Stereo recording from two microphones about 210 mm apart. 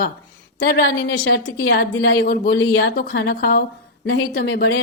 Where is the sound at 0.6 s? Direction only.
50° left (ahead or behind).